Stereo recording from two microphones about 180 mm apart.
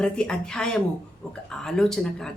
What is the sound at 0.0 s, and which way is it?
A woman's voice, 5° left (ahead or behind).